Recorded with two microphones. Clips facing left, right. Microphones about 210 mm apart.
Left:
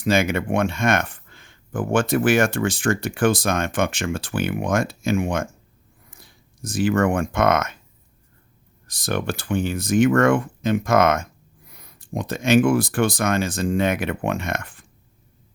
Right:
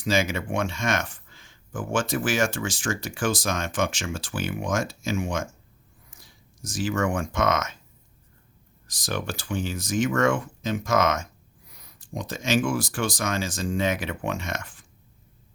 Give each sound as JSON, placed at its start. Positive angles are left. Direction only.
{"t": 0.0, "sound": "speech", "side_deg": 60}
{"t": 8.9, "sound": "speech", "side_deg": 55}